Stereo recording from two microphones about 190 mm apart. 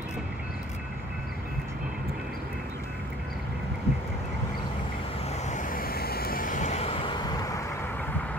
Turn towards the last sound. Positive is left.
turn(degrees=20)  # may be behind; listen again after turning